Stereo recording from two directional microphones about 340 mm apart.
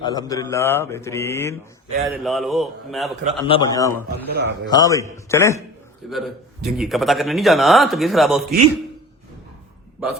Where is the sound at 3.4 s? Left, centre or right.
Centre.